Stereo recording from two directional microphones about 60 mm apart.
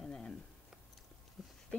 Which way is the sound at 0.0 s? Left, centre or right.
Centre.